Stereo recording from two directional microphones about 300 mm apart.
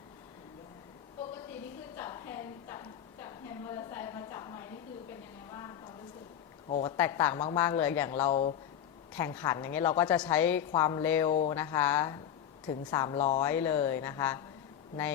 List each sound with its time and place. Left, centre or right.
2.0 s a sound: centre
6.7 s speech: left
6.9 s a woman's voice: centre
8.3 s speech: left
9.1 s a woman's voice: centre
13.1 s speech: left
13.4 s a woman's voice: centre